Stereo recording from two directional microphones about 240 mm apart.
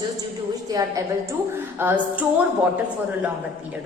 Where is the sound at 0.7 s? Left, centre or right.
Centre.